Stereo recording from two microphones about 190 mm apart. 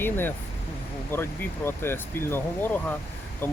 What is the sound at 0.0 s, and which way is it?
Speech, 10° left (ahead or behind).